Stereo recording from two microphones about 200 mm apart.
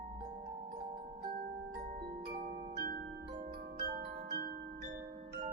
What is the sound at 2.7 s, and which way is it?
Glockenspiel, 45° right (ahead or behind).